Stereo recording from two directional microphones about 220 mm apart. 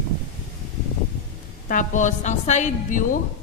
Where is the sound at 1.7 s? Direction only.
35° left (ahead or behind).